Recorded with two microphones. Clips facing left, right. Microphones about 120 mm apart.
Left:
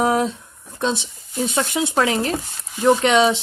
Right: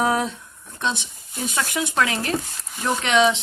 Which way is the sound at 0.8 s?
30° left (ahead or behind).